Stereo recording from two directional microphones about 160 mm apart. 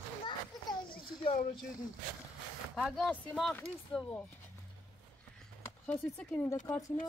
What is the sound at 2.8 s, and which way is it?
Speech, centre (ahead or behind).